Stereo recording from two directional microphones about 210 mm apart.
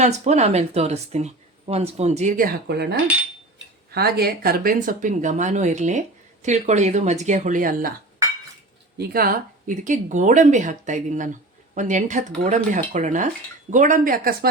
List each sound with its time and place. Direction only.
0.0 s speech: 30° right (ahead or behind); by 2.9 s 50° right (ahead or behind)
3.9 s speech: 50° right (ahead or behind)
9.0 s speech: 45° right (ahead or behind)